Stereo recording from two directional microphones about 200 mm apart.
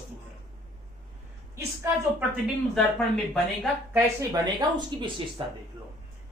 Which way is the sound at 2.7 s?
Centre (ahead or behind).